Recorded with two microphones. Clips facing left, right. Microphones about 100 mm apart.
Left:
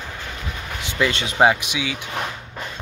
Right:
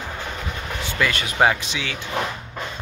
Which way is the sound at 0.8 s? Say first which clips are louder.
Left 2 dB; 20° left (ahead or behind).